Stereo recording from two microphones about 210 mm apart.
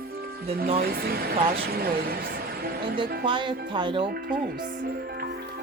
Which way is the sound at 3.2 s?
20° right (ahead or behind).